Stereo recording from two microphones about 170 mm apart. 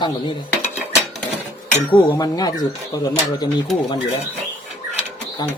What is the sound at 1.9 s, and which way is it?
Speech, 20° left (ahead or behind).